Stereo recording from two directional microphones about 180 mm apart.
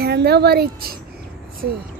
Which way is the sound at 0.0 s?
65° right (ahead or behind).